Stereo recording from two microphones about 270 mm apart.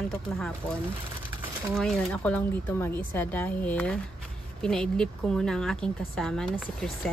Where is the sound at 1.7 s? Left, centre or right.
Centre.